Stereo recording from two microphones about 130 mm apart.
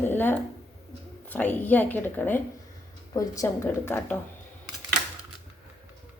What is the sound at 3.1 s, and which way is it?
Speech, 25° left (ahead or behind).